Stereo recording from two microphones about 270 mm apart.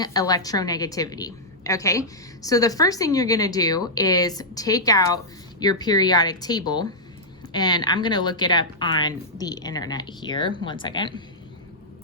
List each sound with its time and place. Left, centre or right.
0.0 s a woman's voice: centre